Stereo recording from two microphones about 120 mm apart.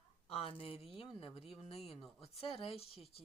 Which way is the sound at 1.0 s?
50° left (ahead or behind).